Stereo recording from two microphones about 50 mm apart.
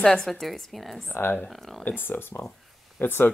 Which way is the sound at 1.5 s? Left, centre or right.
Centre.